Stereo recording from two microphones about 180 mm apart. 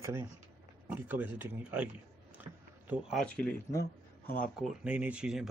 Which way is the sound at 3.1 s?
5° left (ahead or behind).